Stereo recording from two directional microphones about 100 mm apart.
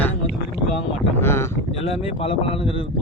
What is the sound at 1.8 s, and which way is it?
Speech, 75° left (ahead or behind).